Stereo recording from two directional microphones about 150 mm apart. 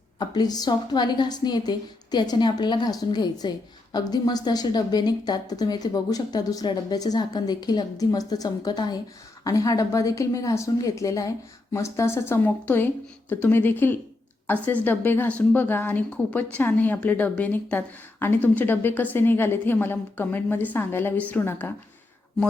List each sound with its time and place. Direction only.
0.2 s a woman's voice: 25° left (ahead or behind); by 21.7 s 10° left (ahead or behind)